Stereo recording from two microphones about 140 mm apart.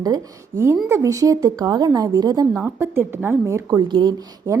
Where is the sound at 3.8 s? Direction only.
35° right (ahead or behind).